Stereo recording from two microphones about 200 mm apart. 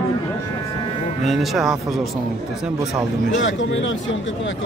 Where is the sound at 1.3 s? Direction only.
Centre (ahead or behind).